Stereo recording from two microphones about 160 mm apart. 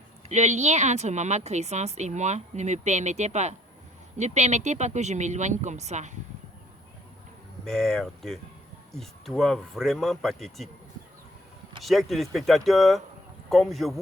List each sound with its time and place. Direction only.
0.3 s a woman's voice: 45° right (ahead or behind)
7.6 s speech: 5° left (ahead or behind)
11.8 s speech: centre (ahead or behind)